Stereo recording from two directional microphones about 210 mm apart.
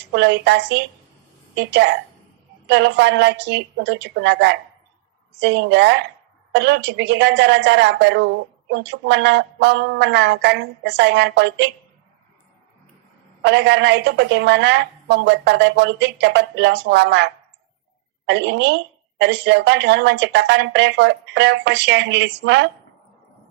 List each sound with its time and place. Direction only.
0.1 s a woman's voice: 55° right (ahead or behind)
13.4 s a woman's voice: 55° right (ahead or behind)